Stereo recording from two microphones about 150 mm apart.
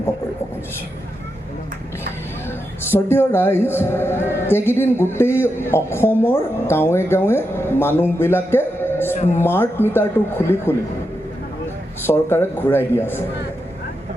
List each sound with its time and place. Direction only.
2.5 s speech: 15° left (ahead or behind)
8.2 s music: 15° left (ahead or behind)
9.1 s speech: 50° left (ahead or behind)
9.4 s speech: 15° left (ahead or behind)
12.0 s speech: 15° left (ahead or behind)